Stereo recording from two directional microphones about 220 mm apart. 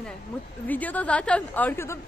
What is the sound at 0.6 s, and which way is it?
A woman's voice, 5° left (ahead or behind).